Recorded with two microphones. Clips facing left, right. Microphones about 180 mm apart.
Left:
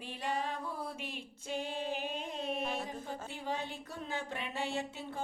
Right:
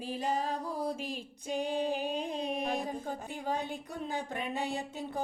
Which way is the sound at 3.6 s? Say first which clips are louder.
Right 4 dB; 15° right (ahead or behind).